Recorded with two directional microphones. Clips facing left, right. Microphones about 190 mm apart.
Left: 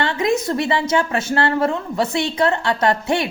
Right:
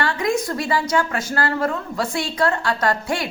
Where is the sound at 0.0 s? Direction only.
25° left (ahead or behind).